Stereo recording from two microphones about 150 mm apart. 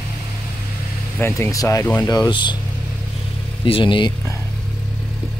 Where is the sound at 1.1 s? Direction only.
15° left (ahead or behind).